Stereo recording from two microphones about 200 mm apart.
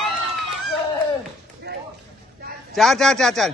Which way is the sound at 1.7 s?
55° right (ahead or behind).